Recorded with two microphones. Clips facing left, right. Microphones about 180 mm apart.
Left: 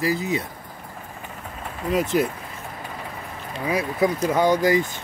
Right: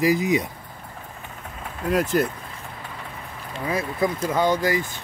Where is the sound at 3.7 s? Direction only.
15° left (ahead or behind).